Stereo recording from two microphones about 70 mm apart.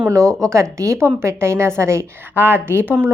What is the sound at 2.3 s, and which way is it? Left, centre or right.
Speech, right.